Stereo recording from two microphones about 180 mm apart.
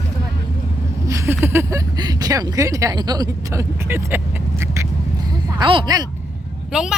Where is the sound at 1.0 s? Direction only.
15° right (ahead or behind).